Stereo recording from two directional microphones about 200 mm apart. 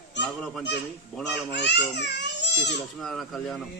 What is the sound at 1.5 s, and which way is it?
Speech, 60° left (ahead or behind).